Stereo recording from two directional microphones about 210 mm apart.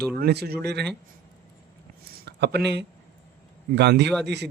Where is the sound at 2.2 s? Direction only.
55° right (ahead or behind).